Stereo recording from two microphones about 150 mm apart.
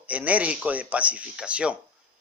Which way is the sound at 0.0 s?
10° right (ahead or behind).